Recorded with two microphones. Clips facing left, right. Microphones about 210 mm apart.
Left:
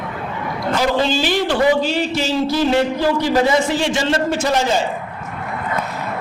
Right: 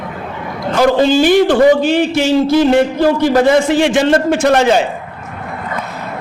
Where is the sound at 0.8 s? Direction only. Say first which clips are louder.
Right 8 dB; 50° right (ahead or behind).